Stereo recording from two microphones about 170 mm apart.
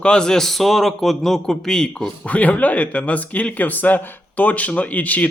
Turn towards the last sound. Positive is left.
turn(degrees=10)  # may be behind; listen again after turning